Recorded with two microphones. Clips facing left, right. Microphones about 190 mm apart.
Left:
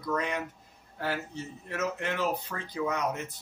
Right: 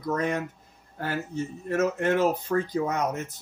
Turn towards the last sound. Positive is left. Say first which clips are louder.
# right 4 dB
turn(degrees=-45)  # may be behind; listen again after turning